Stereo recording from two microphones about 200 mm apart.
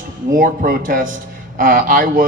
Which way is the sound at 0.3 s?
45° right (ahead or behind).